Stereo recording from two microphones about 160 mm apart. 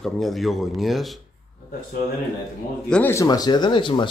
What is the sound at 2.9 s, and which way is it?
Speech, 15° left (ahead or behind).